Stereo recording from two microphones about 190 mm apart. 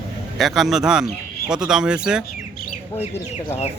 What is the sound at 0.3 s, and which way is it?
Speech, centre (ahead or behind).